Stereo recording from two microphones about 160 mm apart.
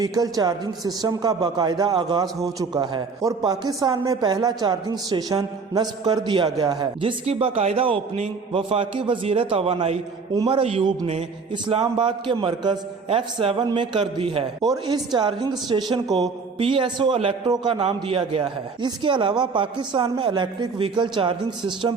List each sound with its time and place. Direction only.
0.0 s a man's voice: 25° right (ahead or behind); by 11.3 s 40° right (ahead or behind)
11.5 s a man's voice: 30° right (ahead or behind)
16.0 s a sound: centre (ahead or behind)
16.6 s a man's voice: 35° right (ahead or behind)